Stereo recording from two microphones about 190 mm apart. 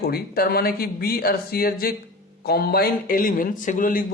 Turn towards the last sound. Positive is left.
turn(degrees=45)  # may be behind; listen again after turning